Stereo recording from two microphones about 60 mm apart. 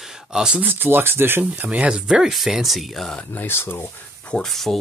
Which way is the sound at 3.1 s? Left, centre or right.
Left.